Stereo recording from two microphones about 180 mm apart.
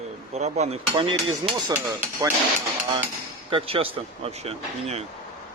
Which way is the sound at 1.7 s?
15° right (ahead or behind).